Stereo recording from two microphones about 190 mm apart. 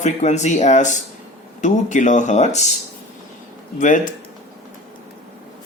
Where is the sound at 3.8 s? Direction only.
40° left (ahead or behind).